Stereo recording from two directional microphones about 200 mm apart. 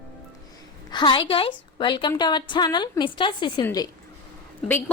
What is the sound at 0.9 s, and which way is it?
A woman's voice, 20° left (ahead or behind).